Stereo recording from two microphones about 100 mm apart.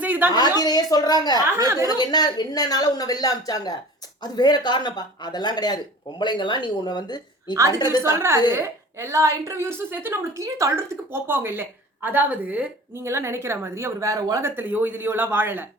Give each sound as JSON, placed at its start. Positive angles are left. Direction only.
{"t": 0.0, "sound": "a sound", "side_deg": -15}
{"t": 0.3, "sound": "speech", "side_deg": 45}
{"t": 1.5, "sound": "speech", "side_deg": -30}
{"t": 1.9, "sound": "speech", "side_deg": 45}
{"t": 8.1, "sound": "a woman's voice", "side_deg": -25}
{"t": 12.9, "sound": "a woman's voice", "side_deg": -25}
{"t": 14.5, "sound": "a woman's voice", "side_deg": -20}